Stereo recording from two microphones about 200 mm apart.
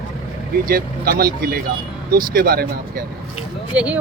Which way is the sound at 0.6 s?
50° right (ahead or behind).